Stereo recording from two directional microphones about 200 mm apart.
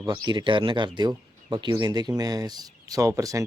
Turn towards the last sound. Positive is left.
turn(degrees=-15)  # may be behind; listen again after turning